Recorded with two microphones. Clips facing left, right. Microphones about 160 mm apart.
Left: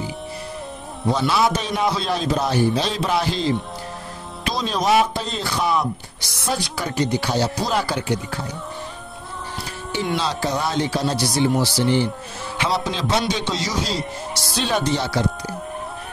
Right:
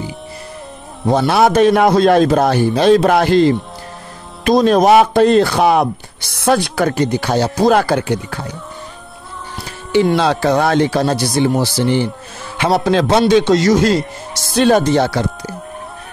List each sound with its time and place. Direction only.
1.1 s a man's voice: 60° right (ahead or behind)
10.1 s a man's voice: 65° right (ahead or behind)